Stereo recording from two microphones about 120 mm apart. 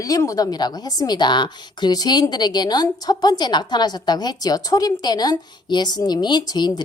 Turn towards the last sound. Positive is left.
turn(degrees=35)  # may be behind; listen again after turning